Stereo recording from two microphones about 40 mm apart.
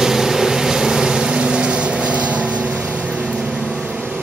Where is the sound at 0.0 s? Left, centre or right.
Centre; by 2.7 s right.